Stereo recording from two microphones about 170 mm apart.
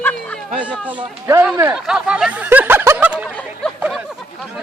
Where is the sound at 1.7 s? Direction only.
5° right (ahead or behind).